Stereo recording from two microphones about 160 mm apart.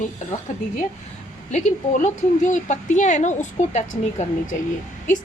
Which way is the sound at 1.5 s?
50° left (ahead or behind).